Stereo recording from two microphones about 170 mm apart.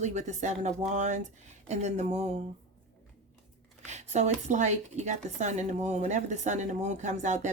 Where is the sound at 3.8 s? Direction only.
40° right (ahead or behind).